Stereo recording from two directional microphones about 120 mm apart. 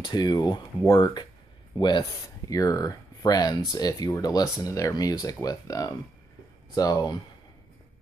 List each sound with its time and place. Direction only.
0.0 s speech: 35° left (ahead or behind)